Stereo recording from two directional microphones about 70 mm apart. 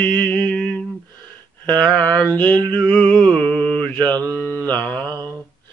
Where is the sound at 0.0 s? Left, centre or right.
Left.